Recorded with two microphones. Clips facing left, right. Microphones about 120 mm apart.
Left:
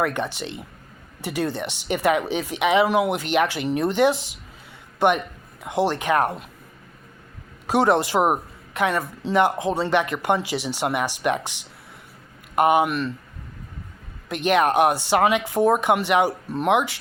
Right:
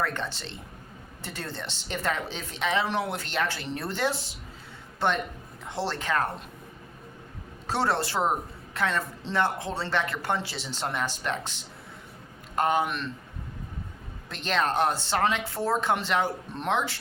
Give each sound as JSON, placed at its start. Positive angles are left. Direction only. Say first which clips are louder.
{"t": 0.0, "sound": "speech", "louder": "left 6 dB", "side_deg": 15}
{"t": 7.7, "sound": "speech", "louder": "left 8 dB", "side_deg": 15}
{"t": 12.5, "sound": "speech", "louder": "left 7 dB", "side_deg": 15}
{"t": 14.3, "sound": "speech", "louder": "left 8 dB", "side_deg": 15}